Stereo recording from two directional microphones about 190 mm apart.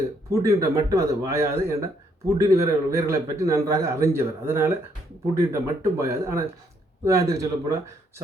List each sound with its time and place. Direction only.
0.3 s a man's voice: 15° right (ahead or behind)